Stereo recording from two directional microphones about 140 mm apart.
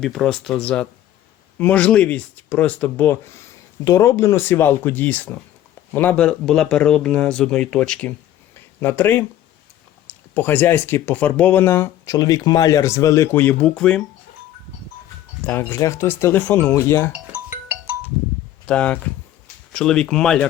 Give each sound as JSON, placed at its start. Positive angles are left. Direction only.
{"t": 0.0, "sound": "speech", "side_deg": 0}
{"t": 15.4, "sound": "speech", "side_deg": 15}
{"t": 17.1, "sound": "music", "side_deg": -10}
{"t": 18.6, "sound": "speech", "side_deg": 5}